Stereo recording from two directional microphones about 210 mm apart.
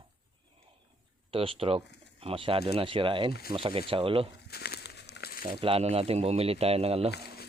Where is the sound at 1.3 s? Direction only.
25° right (ahead or behind).